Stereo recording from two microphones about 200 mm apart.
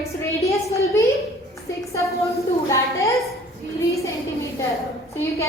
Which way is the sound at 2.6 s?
15° left (ahead or behind).